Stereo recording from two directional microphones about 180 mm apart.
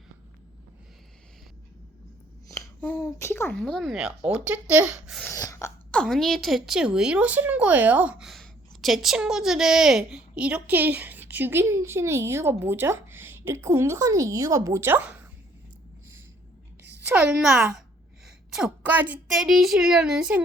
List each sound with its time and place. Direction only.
2.5 s speech: 15° left (ahead or behind)
3.6 s a woman's voice: centre (ahead or behind)
5.2 s gasp: 15° left (ahead or behind)
5.9 s a woman's voice: centre (ahead or behind)
17.1 s a woman's voice: 5° right (ahead or behind)